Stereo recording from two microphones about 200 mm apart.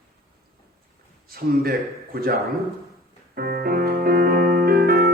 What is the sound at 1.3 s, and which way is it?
Speech, 50° right (ahead or behind).